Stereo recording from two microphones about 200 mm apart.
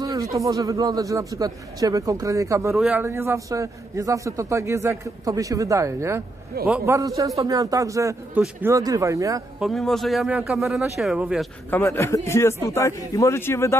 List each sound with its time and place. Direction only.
0.0 s a man's voice: 15° right (ahead or behind)
9.6 s speech: centre (ahead or behind)
11.7 s a man's voice: 10° left (ahead or behind)